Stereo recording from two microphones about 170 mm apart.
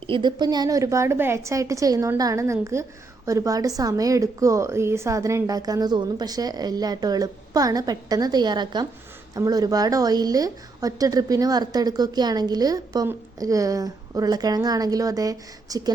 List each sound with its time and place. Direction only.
0.1 s a woman's voice: 25° right (ahead or behind)